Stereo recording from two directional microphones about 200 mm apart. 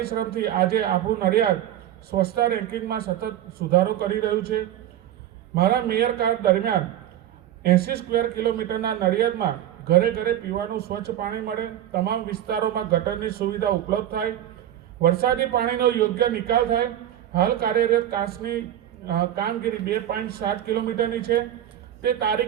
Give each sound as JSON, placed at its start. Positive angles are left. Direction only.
{"t": 0.0, "sound": "a man's voice", "side_deg": -50}